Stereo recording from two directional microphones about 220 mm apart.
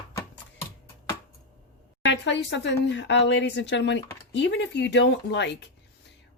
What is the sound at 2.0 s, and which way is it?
Speech, 55° left (ahead or behind).